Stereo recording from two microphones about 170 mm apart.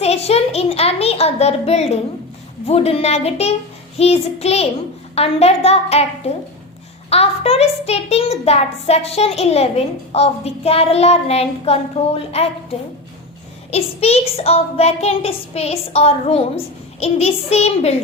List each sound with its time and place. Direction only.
0.0 s a child's voice: 40° left (ahead or behind)
13.7 s a child's voice: 35° left (ahead or behind)